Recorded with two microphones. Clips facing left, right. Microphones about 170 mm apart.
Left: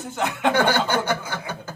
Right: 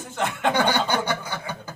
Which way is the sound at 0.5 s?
15° right (ahead or behind).